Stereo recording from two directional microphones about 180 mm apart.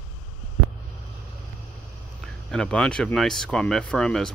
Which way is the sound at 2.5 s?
5° left (ahead or behind).